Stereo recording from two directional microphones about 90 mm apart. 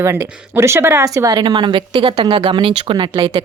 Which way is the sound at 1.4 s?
60° right (ahead or behind).